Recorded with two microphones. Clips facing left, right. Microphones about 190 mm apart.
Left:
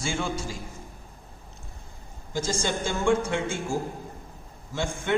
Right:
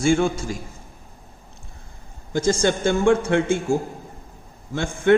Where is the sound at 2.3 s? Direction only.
60° right (ahead or behind).